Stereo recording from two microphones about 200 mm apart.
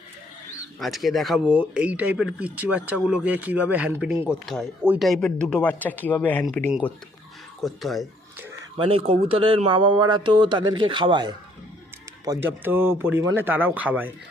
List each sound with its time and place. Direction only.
0.8 s speech: centre (ahead or behind)
8.8 s speech: 30° right (ahead or behind); by 14.1 s 10° right (ahead or behind)